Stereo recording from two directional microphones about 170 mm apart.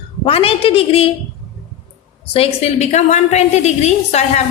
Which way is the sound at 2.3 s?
35° left (ahead or behind).